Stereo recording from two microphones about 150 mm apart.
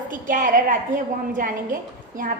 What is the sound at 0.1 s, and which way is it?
A woman's voice, 65° right (ahead or behind).